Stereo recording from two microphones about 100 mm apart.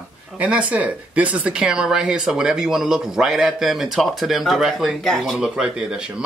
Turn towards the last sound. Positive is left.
turn(degrees=-10)  # may be behind; listen again after turning